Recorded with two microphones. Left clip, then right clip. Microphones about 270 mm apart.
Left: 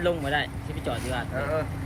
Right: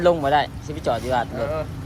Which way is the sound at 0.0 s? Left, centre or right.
Right.